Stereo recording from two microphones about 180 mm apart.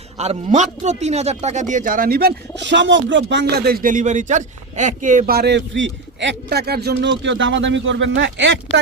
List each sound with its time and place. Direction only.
0.2 s speech: 40° right (ahead or behind); by 7.1 s 65° right (ahead or behind)
7.2 s speech: 90° right